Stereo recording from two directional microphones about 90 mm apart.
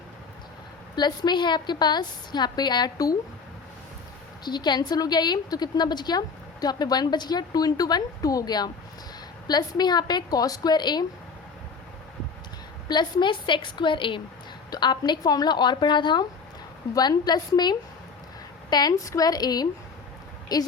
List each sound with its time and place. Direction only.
0.9 s a woman's voice: 55° left (ahead or behind)
4.4 s a woman's voice: 55° left (ahead or behind)
12.9 s speech: 55° left (ahead or behind)
14.7 s a woman's voice: 55° left (ahead or behind)